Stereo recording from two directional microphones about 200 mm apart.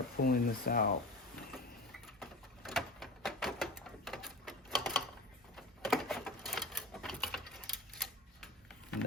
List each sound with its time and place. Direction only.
0.2 s speech: 45° left (ahead or behind)
2.1 s a sound: centre (ahead or behind)
5.5 s typewriter: centre (ahead or behind)